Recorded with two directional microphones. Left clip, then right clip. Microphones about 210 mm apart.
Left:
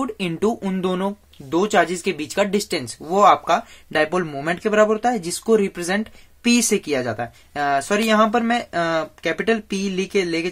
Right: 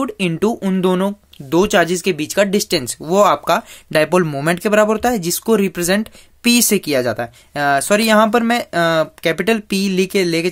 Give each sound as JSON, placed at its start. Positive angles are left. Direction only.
{"t": 0.0, "sound": "speech", "side_deg": -35}